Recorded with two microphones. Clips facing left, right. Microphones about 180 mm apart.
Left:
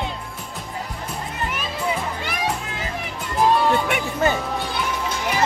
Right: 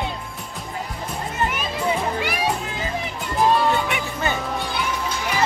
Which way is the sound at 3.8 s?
50° left (ahead or behind).